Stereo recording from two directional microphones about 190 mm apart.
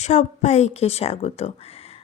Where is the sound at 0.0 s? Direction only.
35° left (ahead or behind).